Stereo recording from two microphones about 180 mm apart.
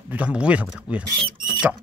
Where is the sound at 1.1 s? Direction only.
25° right (ahead or behind).